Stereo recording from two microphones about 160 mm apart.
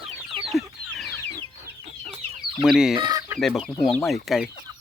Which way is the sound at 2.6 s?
Centre (ahead or behind).